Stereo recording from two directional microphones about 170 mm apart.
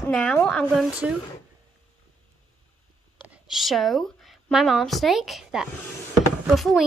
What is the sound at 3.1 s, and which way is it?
A woman's voice, 5° right (ahead or behind).